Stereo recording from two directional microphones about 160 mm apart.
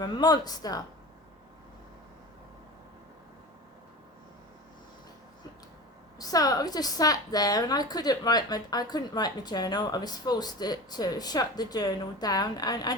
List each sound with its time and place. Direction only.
0.0 s a woman's voice: 25° left (ahead or behind)
6.1 s a woman's voice: 25° left (ahead or behind)